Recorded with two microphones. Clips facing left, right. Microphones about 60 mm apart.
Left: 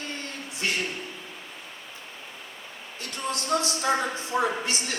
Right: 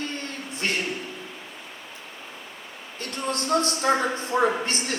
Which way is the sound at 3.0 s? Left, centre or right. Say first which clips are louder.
Right 3 dB; right.